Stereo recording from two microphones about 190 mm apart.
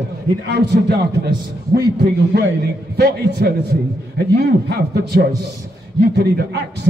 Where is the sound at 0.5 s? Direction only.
60° right (ahead or behind).